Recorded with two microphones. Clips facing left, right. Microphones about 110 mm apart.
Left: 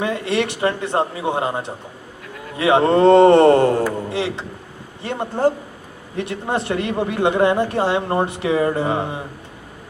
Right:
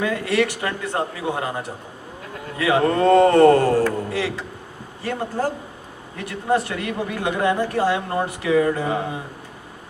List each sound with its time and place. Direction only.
0.0 s speech: 25° left (ahead or behind)